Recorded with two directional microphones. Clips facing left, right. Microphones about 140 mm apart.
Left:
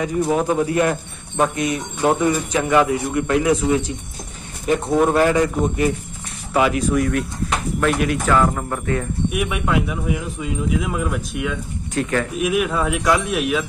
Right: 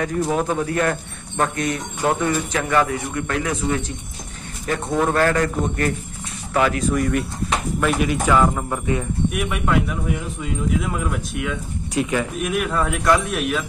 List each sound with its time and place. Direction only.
0.0 s a man's voice: 10° left (ahead or behind)
4.9 s speech: 15° left (ahead or behind); by 9.0 s 10° right (ahead or behind)
9.3 s speech: centre (ahead or behind)
11.9 s speech: 10° right (ahead or behind)
12.4 s speech: 5° left (ahead or behind)